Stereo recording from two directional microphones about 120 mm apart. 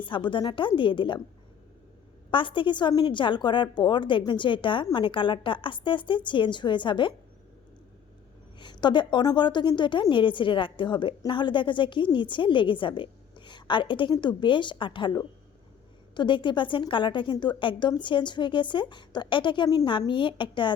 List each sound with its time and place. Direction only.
0.0 s a woman's voice: 40° left (ahead or behind)
2.3 s a woman's voice: 45° left (ahead or behind)
8.5 s a woman's voice: 40° left (ahead or behind)
16.1 s a woman's voice: 40° left (ahead or behind)